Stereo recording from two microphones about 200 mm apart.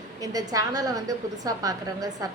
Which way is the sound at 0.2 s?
20° right (ahead or behind).